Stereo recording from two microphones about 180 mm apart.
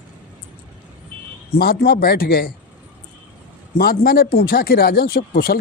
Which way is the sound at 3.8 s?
55° left (ahead or behind).